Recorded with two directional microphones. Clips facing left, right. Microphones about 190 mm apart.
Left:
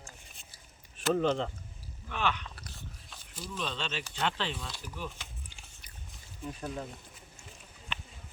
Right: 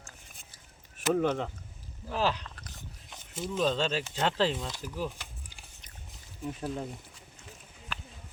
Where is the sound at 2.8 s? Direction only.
20° right (ahead or behind).